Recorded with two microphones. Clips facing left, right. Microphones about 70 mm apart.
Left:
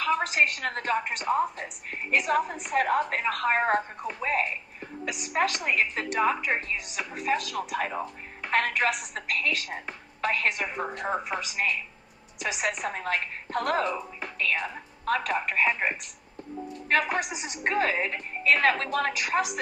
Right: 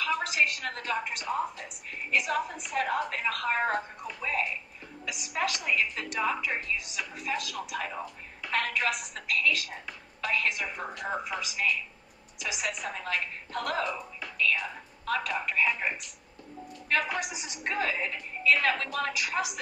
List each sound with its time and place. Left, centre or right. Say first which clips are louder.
0.0 s a woman's voice: left 3 dB; left